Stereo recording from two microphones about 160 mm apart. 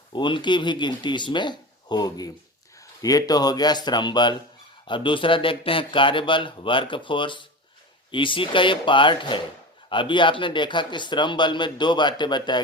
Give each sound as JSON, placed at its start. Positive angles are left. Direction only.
{"t": 0.1, "sound": "a man's voice", "side_deg": 30}